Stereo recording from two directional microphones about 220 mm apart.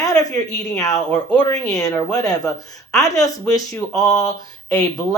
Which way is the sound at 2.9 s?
15° left (ahead or behind).